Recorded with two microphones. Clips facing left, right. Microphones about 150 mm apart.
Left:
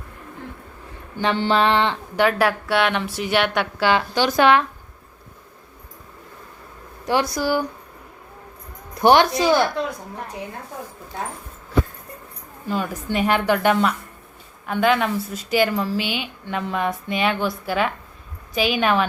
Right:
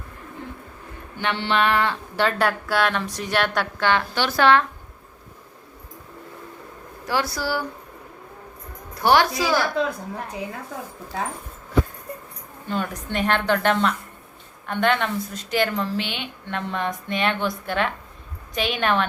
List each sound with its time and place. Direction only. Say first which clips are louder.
1.1 s a woman's voice: left 4 dB; 35° left (ahead or behind); by 2.3 s 20° left (ahead or behind)
2.4 s a woman's voice: left 2 dB; centre (ahead or behind)
3.8 s a woman's voice: left 3 dB; 15° left (ahead or behind)
7.1 s a woman's voice: left 4 dB; 20° left (ahead or behind)
9.0 s a woman's voice: left 4 dB; 20° left (ahead or behind)
12.6 s a woman's voice: left 2 dB; 5° left (ahead or behind)